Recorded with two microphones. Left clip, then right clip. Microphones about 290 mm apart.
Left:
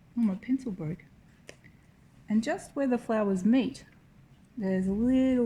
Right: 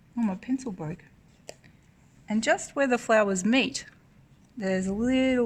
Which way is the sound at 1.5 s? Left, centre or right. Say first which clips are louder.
Right 5 dB; centre.